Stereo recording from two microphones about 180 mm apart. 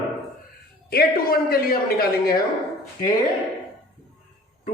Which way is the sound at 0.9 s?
60° left (ahead or behind).